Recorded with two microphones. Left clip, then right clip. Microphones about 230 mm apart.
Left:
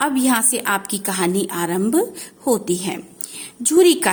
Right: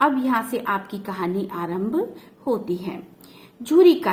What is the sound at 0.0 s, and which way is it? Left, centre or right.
A woman's voice, left.